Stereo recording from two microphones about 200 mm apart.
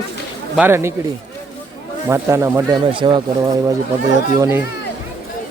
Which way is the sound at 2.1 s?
15° right (ahead or behind).